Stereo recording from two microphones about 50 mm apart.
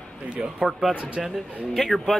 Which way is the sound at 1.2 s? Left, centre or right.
Centre.